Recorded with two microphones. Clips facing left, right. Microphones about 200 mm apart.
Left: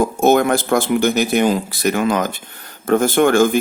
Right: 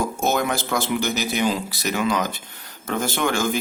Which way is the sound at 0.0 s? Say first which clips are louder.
Left 8 dB; 55° left (ahead or behind).